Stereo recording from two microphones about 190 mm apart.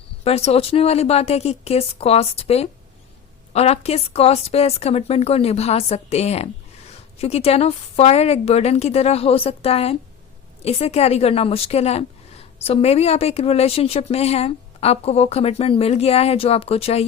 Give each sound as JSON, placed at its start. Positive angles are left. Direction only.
{"t": 0.3, "sound": "a woman's voice", "side_deg": 30}